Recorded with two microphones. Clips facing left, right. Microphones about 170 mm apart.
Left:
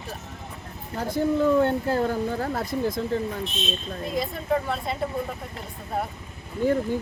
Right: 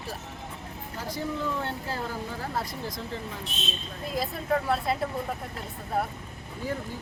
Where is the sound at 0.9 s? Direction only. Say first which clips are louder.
Left 9 dB; 55° left (ahead or behind).